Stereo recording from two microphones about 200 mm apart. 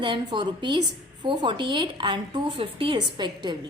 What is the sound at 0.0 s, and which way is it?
A woman's voice, 25° right (ahead or behind).